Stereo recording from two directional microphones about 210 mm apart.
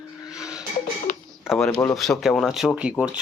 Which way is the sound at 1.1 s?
35° left (ahead or behind).